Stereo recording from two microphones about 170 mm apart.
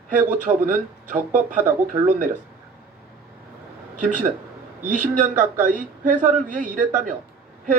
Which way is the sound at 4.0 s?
50° right (ahead or behind).